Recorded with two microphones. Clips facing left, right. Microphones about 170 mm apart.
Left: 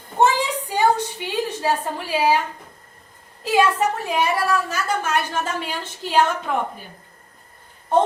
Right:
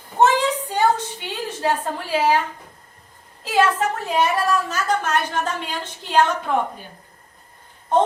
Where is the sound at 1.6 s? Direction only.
10° left (ahead or behind).